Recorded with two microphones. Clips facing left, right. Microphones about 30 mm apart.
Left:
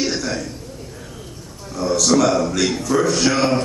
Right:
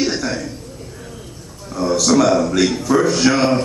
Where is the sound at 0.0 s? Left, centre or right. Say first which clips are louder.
Right 2 dB; centre.